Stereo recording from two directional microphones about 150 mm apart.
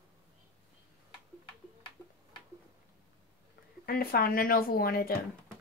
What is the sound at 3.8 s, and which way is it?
Speech, 85° left.